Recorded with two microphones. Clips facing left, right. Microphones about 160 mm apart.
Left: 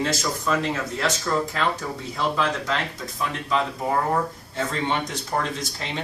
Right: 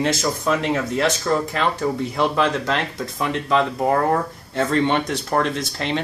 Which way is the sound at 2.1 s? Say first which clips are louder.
Right 2 dB; 65° right (ahead or behind).